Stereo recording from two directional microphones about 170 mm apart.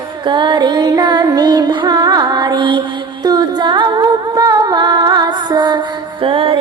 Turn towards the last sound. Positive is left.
turn(degrees=-30)  # may be behind; listen again after turning